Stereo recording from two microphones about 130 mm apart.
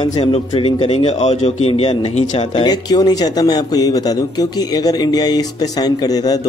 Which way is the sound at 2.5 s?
30° left (ahead or behind).